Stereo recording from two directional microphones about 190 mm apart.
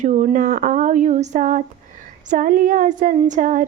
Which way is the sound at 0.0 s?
40° right (ahead or behind).